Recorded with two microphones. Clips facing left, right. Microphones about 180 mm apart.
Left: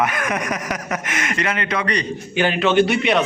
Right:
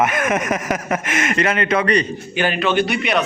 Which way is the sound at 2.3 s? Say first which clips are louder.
Left 2 dB; 20° left (ahead or behind).